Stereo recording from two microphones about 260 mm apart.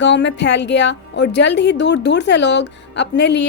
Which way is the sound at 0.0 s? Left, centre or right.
Left.